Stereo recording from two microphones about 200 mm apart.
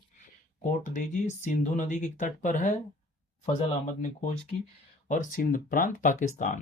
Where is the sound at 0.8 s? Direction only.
35° left (ahead or behind).